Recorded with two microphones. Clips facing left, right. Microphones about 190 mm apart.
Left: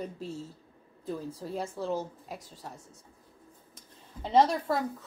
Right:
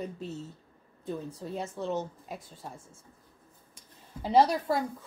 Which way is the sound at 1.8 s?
5° left (ahead or behind).